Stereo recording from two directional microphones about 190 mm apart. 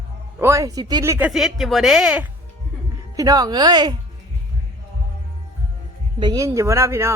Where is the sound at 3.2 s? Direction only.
20° right (ahead or behind).